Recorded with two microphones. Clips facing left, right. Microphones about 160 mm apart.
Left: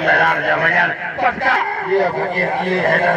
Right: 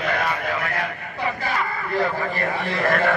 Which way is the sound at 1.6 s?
45° left (ahead or behind).